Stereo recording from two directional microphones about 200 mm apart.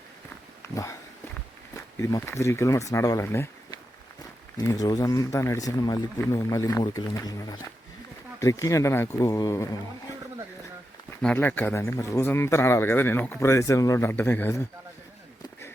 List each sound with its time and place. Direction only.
2.0 s speech: 15° left (ahead or behind)
11.1 s speech: 5° left (ahead or behind)